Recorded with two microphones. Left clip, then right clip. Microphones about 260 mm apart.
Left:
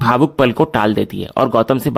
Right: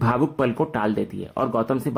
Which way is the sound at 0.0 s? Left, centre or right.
Left.